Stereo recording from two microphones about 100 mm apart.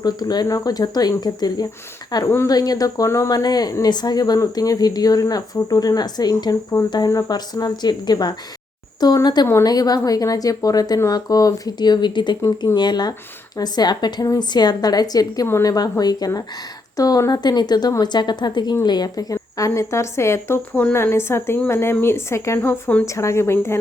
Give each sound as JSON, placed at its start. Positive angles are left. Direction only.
{"t": 0.0, "sound": "speech", "side_deg": 45}
{"t": 23.0, "sound": "speech", "side_deg": 30}